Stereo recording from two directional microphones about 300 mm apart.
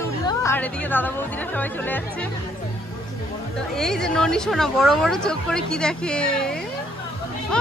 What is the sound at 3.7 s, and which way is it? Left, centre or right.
A woman's voice, centre.